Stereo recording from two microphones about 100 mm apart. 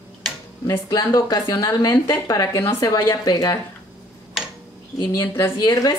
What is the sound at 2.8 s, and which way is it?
Speech, 40° left (ahead or behind).